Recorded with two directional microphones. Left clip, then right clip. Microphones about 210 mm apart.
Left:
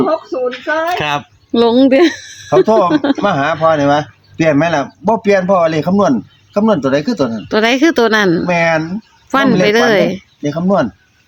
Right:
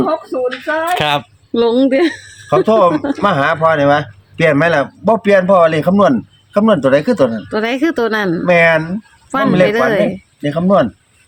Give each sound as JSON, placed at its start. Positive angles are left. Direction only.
{"t": 0.0, "sound": "speech", "side_deg": -45}
{"t": 1.5, "sound": "speech", "side_deg": 25}
{"t": 2.6, "sound": "speech", "side_deg": -15}
{"t": 2.9, "sound": "speech", "side_deg": 35}
{"t": 3.2, "sound": "speech", "side_deg": -15}
{"t": 7.4, "sound": "speech", "side_deg": 35}
{"t": 8.4, "sound": "speech", "side_deg": -10}
{"t": 9.6, "sound": "speech", "side_deg": 30}
{"t": 10.4, "sound": "speech", "side_deg": -10}